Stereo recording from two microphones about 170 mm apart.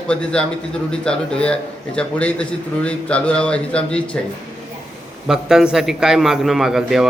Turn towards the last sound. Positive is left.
turn(degrees=0)  # may be behind; listen again after turning